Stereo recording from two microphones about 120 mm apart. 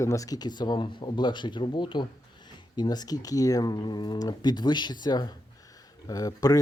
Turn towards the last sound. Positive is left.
turn(degrees=30)  # may be behind; listen again after turning